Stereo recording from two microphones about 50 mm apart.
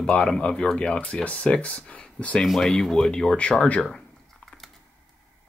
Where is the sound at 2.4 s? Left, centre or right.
Centre.